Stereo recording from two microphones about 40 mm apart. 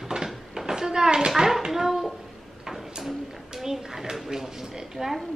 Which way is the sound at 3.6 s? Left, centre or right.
Centre.